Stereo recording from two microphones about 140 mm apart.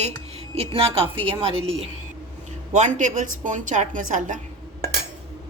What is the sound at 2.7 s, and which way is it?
A woman's voice, 60° right (ahead or behind).